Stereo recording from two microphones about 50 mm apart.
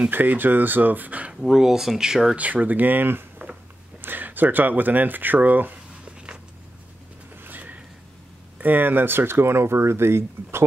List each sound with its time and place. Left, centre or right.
0.1 s speech: right
1.3 s speech: centre
2.3 s speech: right
6.0 s a sound: right
7.4 s a sound: right
8.5 s speech: right